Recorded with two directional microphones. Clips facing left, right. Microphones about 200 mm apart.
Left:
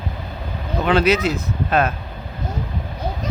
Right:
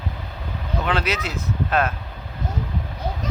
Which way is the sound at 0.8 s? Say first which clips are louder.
Left 9 dB; centre (ahead or behind).